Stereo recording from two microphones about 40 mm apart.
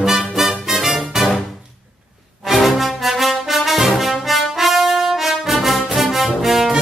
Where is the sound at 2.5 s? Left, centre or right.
Centre.